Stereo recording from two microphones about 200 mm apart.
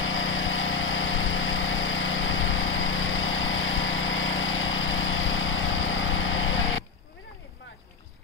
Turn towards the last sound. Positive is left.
turn(degrees=80)